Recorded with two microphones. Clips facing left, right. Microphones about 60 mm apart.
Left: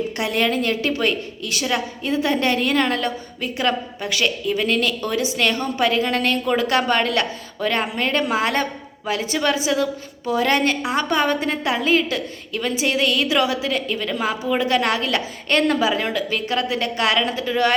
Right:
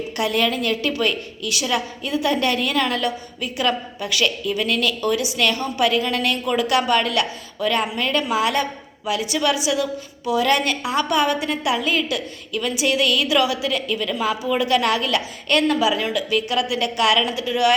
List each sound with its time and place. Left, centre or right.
0.2 s a woman's voice: left